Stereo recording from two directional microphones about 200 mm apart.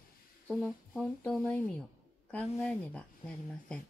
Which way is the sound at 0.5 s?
5° left (ahead or behind).